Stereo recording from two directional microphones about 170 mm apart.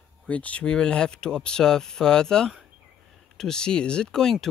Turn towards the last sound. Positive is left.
turn(degrees=5)  # may be behind; listen again after turning